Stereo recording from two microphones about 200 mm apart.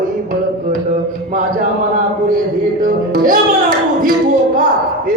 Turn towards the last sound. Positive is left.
turn(degrees=-45)  # may be behind; listen again after turning